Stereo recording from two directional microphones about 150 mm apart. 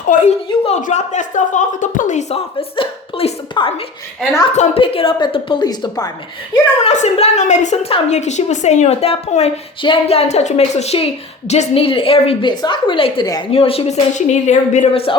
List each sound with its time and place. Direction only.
0.1 s speech: 55° left (ahead or behind)
0.4 s a sound: 40° left (ahead or behind)
0.8 s a woman's voice: 55° left (ahead or behind)
2.3 s a woman's voice: 40° left (ahead or behind)
4.5 s a woman's voice: 50° left (ahead or behind)
4.8 s a woman's voice: 40° left (ahead or behind)
6.8 s a woman's voice: 45° left (ahead or behind)